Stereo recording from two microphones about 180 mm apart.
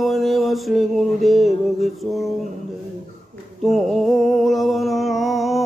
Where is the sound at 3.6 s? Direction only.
Centre (ahead or behind).